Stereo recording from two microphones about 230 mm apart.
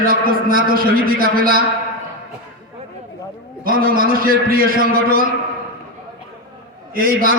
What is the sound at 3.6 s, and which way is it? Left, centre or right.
A man's voice, right.